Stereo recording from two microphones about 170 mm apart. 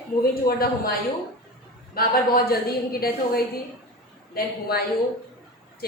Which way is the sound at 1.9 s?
60° left (ahead or behind).